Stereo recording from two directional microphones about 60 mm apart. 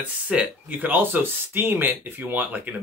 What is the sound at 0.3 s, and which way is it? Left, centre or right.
Speech, right.